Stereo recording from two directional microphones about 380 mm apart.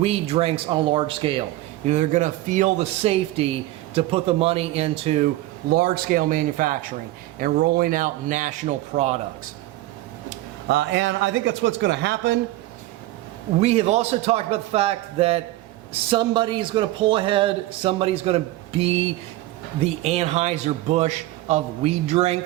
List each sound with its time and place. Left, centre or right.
0.0 s speech: centre
10.2 s speech: right
13.6 s speech: centre